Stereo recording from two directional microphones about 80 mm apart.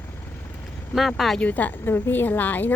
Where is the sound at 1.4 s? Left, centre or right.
Left.